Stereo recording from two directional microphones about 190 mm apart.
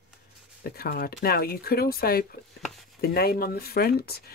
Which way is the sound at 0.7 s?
50° left (ahead or behind).